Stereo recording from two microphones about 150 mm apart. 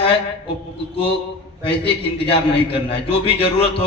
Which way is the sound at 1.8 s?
40° left (ahead or behind).